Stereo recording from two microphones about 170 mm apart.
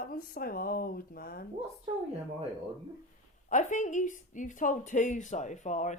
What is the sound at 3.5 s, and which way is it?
A woman's voice, 45° left (ahead or behind).